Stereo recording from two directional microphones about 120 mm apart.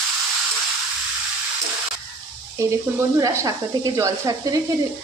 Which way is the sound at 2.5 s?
25° right (ahead or behind).